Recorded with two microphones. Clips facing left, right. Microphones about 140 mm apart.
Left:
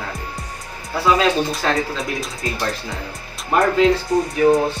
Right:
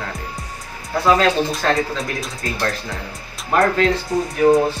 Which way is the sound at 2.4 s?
20° left (ahead or behind).